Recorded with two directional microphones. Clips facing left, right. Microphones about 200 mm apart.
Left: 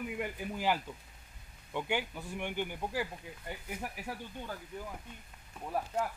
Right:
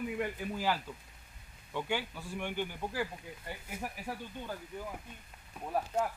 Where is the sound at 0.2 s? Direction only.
15° left (ahead or behind).